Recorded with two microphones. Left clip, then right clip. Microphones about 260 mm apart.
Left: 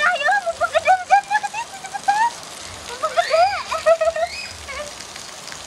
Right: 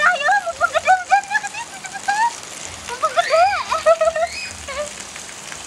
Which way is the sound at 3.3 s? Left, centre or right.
Centre.